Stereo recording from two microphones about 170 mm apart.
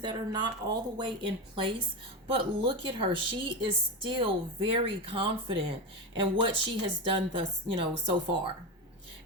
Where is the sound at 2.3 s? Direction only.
30° right (ahead or behind).